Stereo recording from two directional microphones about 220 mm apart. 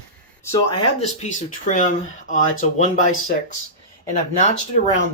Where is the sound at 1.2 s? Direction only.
35° left (ahead or behind).